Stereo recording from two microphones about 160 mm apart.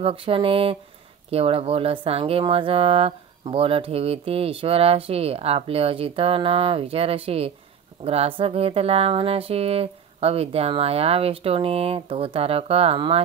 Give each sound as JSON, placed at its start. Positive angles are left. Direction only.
{"t": 0.0, "sound": "speech", "side_deg": -35}